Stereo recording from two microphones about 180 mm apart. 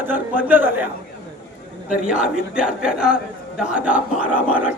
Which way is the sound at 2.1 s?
5° right (ahead or behind).